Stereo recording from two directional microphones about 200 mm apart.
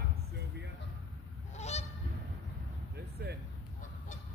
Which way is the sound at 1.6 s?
35° left (ahead or behind).